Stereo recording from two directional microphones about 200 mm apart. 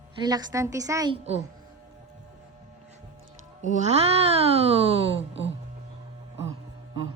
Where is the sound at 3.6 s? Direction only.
35° right (ahead or behind).